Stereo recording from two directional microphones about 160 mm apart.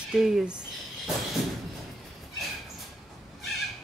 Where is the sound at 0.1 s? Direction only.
5° right (ahead or behind).